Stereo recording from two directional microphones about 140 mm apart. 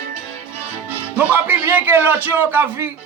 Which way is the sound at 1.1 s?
15° right (ahead or behind).